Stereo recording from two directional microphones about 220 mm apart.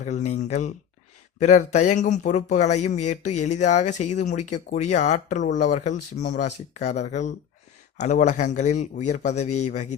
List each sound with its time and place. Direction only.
0.3 s speech: 30° left (ahead or behind)